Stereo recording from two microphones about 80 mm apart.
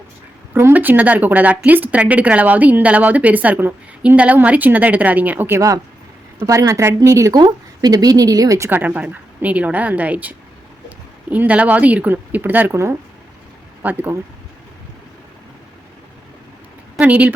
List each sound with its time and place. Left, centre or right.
0.7 s speech: right
5.5 s a woman's voice: right
7.3 s a woman's voice: right
8.7 s speech: right
12.7 s speech: right
13.8 s speech: right
17.0 s speech: centre